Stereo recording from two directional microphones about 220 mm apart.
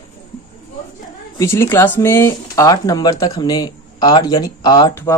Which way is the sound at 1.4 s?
10° left (ahead or behind).